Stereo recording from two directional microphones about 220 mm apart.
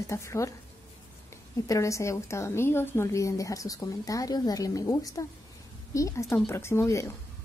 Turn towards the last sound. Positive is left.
turn(degrees=15)  # may be behind; listen again after turning